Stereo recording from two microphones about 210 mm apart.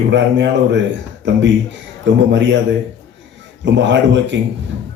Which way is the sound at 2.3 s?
55° right (ahead or behind).